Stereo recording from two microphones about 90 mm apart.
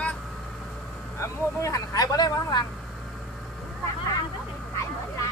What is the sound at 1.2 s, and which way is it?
Speech, 35° left (ahead or behind).